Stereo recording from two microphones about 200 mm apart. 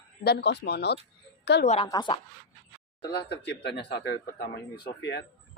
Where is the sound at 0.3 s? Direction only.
55° left (ahead or behind).